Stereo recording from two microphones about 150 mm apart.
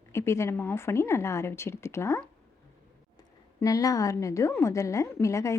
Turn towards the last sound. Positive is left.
turn(degrees=20)  # may be behind; listen again after turning